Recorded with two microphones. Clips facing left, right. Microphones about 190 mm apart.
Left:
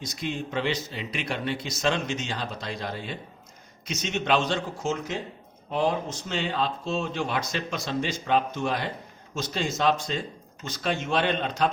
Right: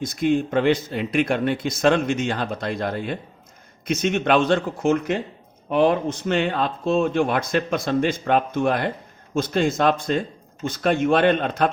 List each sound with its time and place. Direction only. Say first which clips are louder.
0.0 s speech: right 11 dB; 50° right (ahead or behind)